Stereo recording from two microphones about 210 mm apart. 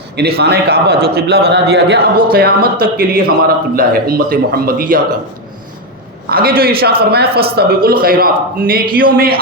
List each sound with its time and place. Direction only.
0.2 s a man's voice: 50° right (ahead or behind)
6.3 s a man's voice: 45° right (ahead or behind)